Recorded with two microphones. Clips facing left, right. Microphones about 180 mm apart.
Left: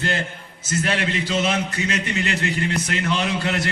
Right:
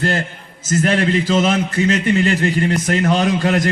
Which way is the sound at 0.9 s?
35° right (ahead or behind).